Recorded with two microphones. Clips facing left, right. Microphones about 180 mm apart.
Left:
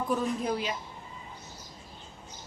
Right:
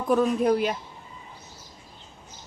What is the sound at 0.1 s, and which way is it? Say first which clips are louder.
Speech: right 10 dB; 60° right (ahead or behind).